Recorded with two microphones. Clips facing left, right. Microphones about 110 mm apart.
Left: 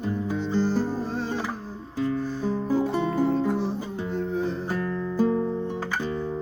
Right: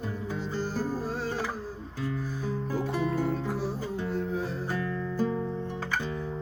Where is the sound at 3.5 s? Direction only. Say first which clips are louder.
Left 4 dB; 5° right (ahead or behind).